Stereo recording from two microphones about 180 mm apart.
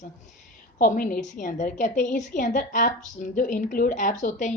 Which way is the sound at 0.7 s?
50° left (ahead or behind).